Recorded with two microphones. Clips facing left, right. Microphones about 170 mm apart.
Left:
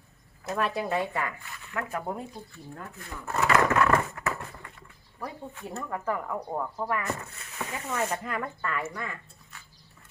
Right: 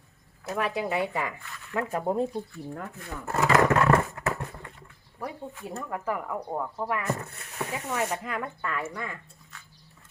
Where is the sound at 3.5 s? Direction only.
25° right (ahead or behind).